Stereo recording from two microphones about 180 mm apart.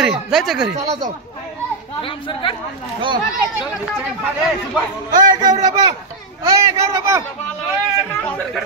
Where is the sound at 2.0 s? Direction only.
30° left (ahead or behind).